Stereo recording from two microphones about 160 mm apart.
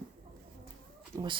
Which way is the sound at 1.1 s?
20° right (ahead or behind).